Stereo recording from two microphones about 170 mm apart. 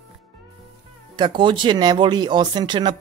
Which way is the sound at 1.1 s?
30° right (ahead or behind).